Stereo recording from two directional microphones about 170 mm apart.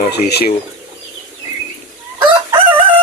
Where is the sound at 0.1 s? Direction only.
70° left (ahead or behind).